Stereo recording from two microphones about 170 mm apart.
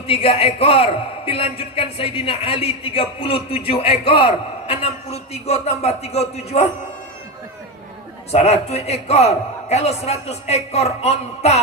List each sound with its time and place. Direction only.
0.1 s a man's voice: 35° left (ahead or behind)
8.3 s a man's voice: 40° left (ahead or behind)